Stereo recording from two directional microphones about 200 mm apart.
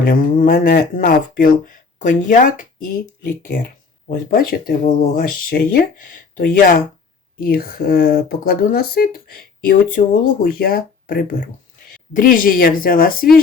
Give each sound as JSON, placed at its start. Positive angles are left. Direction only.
{"t": 0.0, "sound": "speech", "side_deg": 45}